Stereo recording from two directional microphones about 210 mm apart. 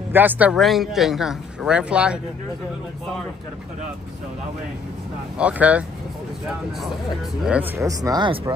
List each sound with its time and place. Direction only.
0.1 s speech: 10° right (ahead or behind)
5.4 s speech: 5° right (ahead or behind)
7.4 s speech: 10° right (ahead or behind)